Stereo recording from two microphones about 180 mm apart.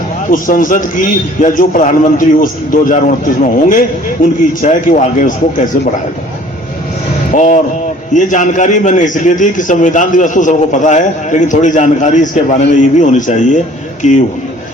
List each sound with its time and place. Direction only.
0.3 s a man's voice: 50° left (ahead or behind)
7.3 s a man's voice: 45° left (ahead or behind)